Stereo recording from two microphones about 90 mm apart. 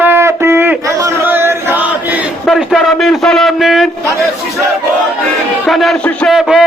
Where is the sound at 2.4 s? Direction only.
Centre (ahead or behind).